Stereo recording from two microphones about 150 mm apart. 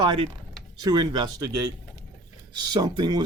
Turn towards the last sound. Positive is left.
turn(degrees=-30)  # may be behind; listen again after turning